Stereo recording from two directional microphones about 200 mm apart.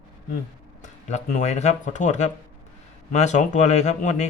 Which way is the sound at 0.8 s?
35° left (ahead or behind).